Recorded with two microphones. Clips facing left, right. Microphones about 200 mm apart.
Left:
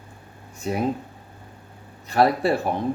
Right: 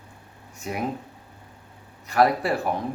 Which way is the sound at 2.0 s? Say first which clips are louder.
Left 2 dB; 30° left (ahead or behind).